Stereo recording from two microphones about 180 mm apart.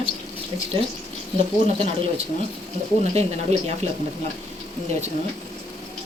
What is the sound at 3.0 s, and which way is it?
Speech, 35° right (ahead or behind).